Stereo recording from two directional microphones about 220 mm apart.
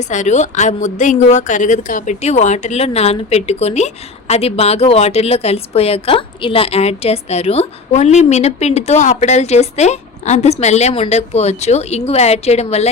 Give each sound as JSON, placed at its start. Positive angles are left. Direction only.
{"t": 0.0, "sound": "a woman's voice", "side_deg": 35}